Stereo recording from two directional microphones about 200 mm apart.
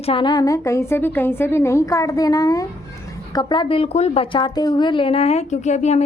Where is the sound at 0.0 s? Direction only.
25° left (ahead or behind).